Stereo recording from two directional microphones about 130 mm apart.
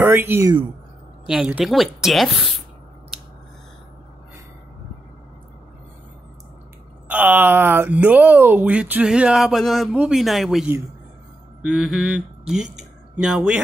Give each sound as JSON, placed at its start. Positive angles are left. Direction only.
{"t": 0.0, "sound": "speech", "side_deg": -15}
{"t": 1.2, "sound": "speech", "side_deg": -5}
{"t": 7.1, "sound": "speech", "side_deg": -15}
{"t": 11.6, "sound": "mantra", "side_deg": -5}
{"t": 12.7, "sound": "a sound", "side_deg": -10}